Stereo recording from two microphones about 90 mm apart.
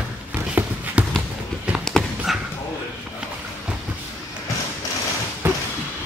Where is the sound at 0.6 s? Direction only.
25° right (ahead or behind).